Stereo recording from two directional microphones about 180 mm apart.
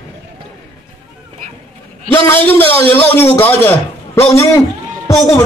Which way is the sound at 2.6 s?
10° left (ahead or behind).